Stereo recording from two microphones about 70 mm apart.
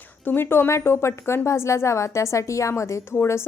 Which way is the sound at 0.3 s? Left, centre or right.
Left.